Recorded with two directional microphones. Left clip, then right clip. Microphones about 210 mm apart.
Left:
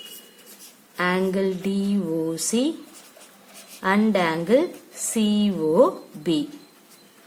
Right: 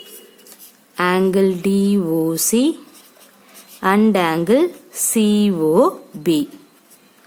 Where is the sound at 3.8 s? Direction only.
50° right (ahead or behind).